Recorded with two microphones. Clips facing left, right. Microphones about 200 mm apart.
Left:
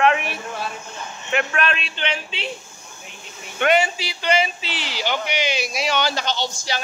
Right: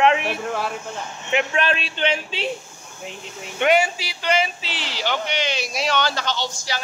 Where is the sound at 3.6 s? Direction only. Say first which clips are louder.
Even; 10° right (ahead or behind).